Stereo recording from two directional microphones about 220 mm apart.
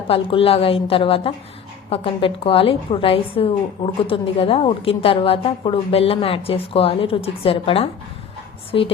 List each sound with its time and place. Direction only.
0.1 s a woman's voice: 25° left (ahead or behind)